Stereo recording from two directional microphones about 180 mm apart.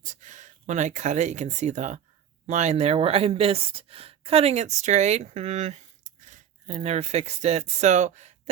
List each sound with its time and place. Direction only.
0.0 s speech: 45° right (ahead or behind)